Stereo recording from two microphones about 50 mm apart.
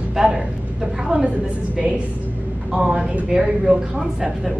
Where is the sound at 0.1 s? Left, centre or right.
Centre.